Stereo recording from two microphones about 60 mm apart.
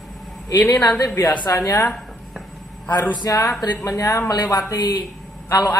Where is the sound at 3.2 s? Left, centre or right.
Left.